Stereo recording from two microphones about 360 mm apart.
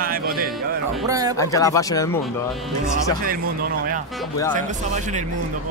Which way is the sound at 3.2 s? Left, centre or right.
Right.